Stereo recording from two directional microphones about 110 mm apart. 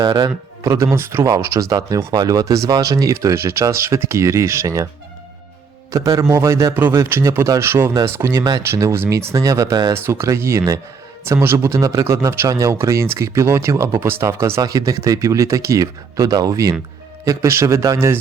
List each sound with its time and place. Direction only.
0.0 s a man's voice: 40° right (ahead or behind)
0.7 s speech: 25° right (ahead or behind)
5.9 s speech: 30° right (ahead or behind)
9.9 s speech: 25° right (ahead or behind)